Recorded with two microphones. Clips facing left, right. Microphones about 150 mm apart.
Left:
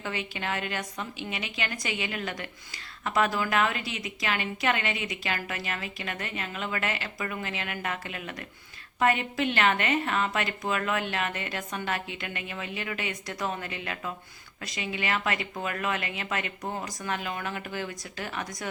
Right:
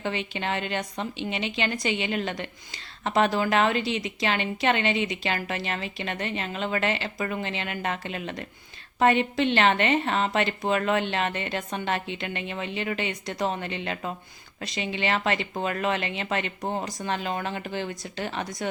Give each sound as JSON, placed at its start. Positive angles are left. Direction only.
{"t": 0.0, "sound": "a woman's voice", "side_deg": -25}